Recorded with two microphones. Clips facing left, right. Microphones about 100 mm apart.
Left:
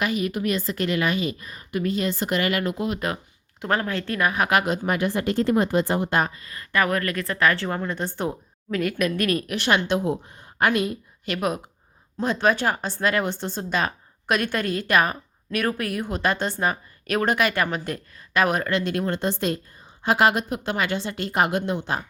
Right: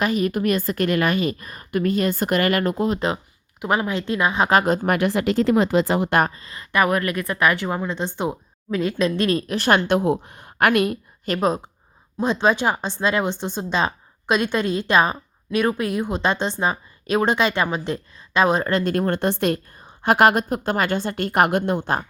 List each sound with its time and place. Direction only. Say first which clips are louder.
0.0 s a woman's voice: right 4 dB; 40° right (ahead or behind)
3.6 s speech: right 3 dB; 15° right (ahead or behind)
4.5 s a woman's voice: right 4 dB; 45° right (ahead or behind)
4.9 s speech: right 3 dB; 85° right; by 6.3 s 65° right (ahead or behind)
6.3 s speech: right 3 dB; 25° right (ahead or behind)
9.6 s a woman's voice: right 5 dB; 45° right (ahead or behind); by 10.9 s 65° right (ahead or behind)
11.3 s speech: right 4 dB; 30° right (ahead or behind)
12.2 s speech: right 2 dB; 20° right (ahead or behind)
18.7 s a woman's voice: right 4 dB; 45° right (ahead or behind)